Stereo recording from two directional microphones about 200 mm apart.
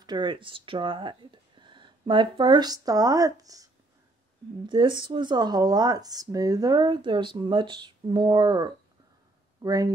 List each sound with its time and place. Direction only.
0.0 s speech: 20° right (ahead or behind)
4.6 s speech: 20° right (ahead or behind)